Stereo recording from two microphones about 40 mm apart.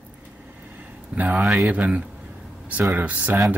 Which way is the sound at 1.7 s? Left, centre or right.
Right.